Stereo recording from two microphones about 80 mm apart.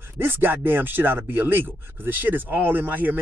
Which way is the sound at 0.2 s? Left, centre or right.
Right.